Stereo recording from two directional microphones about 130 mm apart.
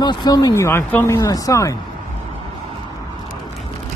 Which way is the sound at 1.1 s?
25° left (ahead or behind).